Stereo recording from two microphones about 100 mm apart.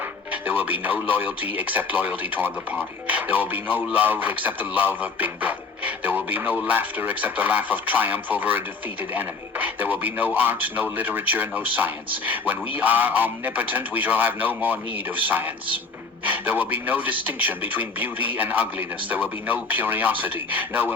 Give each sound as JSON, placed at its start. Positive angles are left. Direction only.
{"t": 0.3, "sound": "a man's voice", "side_deg": -15}